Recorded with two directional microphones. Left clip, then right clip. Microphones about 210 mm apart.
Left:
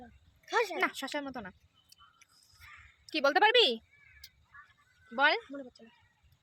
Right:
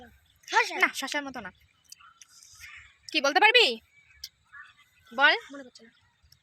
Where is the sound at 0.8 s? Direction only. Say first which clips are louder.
Right 6 dB; 5° right (ahead or behind).